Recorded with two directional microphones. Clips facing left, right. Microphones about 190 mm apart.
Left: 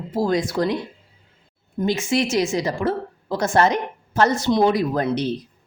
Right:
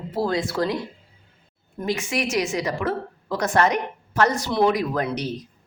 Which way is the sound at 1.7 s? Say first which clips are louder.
Left 5 dB; 25° left (ahead or behind).